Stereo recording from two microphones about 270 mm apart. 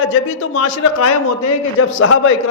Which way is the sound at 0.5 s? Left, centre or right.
Left.